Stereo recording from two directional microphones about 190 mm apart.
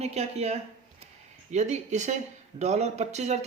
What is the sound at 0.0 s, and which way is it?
Speech, 35° right (ahead or behind).